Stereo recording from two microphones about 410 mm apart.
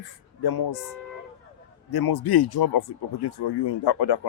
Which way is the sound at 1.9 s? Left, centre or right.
Left.